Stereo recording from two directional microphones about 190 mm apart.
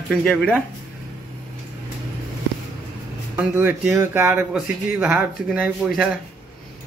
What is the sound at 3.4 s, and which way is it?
A man's voice, 10° right (ahead or behind).